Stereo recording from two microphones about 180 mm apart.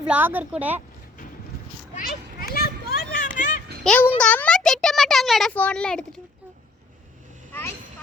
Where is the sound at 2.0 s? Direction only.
60° left (ahead or behind).